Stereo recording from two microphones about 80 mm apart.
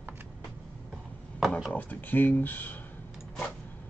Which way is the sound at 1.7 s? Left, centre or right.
Left.